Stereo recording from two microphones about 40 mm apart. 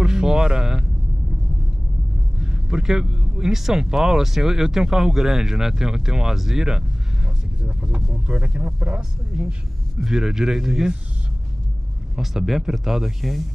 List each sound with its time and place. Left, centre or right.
0.0 s a sound: centre
2.4 s speech: centre
7.6 s speech: right
9.9 s speech: centre
12.2 s speech: centre